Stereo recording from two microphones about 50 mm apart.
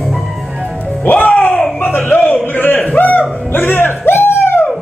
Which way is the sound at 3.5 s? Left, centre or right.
Left.